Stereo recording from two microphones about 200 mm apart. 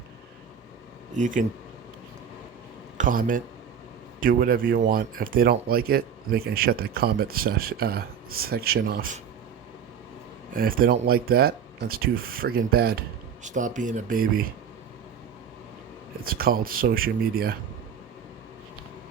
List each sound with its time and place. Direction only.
1.1 s speech: 40° right (ahead or behind)
3.0 s speech: 45° right (ahead or behind)
10.5 s speech: 45° right (ahead or behind)
16.2 s speech: 45° right (ahead or behind)